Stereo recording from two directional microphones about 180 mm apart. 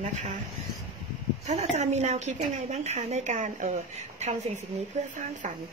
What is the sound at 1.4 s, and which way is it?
A woman's voice, 40° right (ahead or behind).